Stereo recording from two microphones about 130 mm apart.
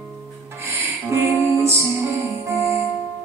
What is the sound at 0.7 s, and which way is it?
Music, 20° right (ahead or behind).